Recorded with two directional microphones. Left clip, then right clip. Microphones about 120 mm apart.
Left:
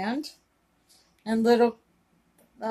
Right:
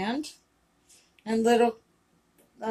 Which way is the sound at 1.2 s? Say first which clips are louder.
Left 1 dB; 55° left (ahead or behind).